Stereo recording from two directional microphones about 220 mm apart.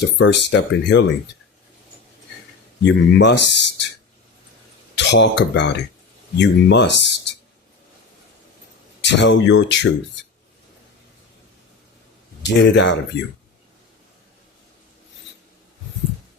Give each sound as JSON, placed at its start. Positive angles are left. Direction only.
{"t": 0.0, "sound": "speech", "side_deg": 50}
{"t": 2.8, "sound": "speech", "side_deg": 55}
{"t": 4.9, "sound": "speech", "side_deg": 55}
{"t": 9.0, "sound": "speech", "side_deg": 55}
{"t": 12.5, "sound": "speech", "side_deg": 55}